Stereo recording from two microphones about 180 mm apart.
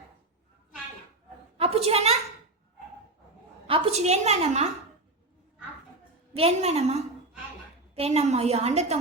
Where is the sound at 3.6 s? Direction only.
30° right (ahead or behind).